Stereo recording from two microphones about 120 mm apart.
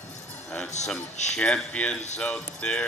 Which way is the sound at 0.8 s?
75° left (ahead or behind).